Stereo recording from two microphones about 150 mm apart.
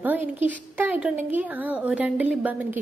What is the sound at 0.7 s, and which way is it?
A woman's voice, 10° right (ahead or behind).